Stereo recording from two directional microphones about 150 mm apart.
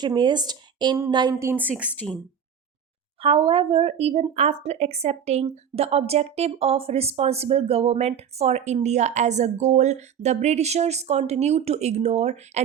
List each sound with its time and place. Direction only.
0.0 s speech: 30° right (ahead or behind); by 1.7 s 15° right (ahead or behind)
2.0 s speech: 10° left (ahead or behind)
3.2 s a woman's voice: 40° right (ahead or behind)